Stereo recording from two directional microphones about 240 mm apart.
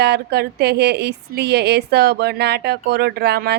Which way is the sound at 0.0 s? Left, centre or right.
Right.